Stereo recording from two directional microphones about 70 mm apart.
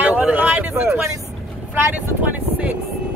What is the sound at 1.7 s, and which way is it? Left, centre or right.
Speech, right.